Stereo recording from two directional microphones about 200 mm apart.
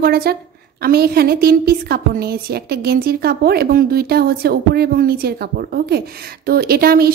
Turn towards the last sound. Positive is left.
turn(degrees=-50)  # may be behind; listen again after turning